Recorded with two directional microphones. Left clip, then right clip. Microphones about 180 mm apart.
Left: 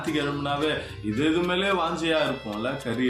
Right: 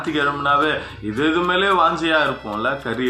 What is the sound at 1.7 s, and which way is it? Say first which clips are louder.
Speech: right 8 dB; 10° left (ahead or behind).